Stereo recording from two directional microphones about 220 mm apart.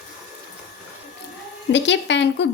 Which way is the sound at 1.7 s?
55° left (ahead or behind).